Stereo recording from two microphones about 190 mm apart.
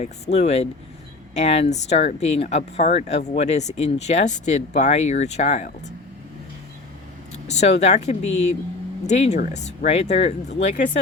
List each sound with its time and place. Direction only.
0.0 s speech: 35° left (ahead or behind)
7.4 s speech: 35° left (ahead or behind)